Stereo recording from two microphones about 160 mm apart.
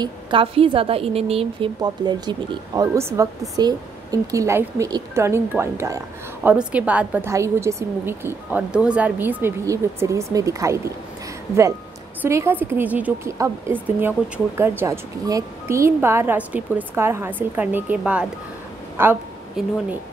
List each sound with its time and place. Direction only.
0.0 s a woman's voice: 30° right (ahead or behind)
1.8 s speech: 25° right (ahead or behind)
12.2 s speech: 15° right (ahead or behind)
19.6 s speech: centre (ahead or behind)